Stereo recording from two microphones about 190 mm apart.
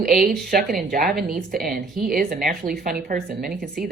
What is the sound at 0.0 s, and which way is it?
Speech, 45° right (ahead or behind).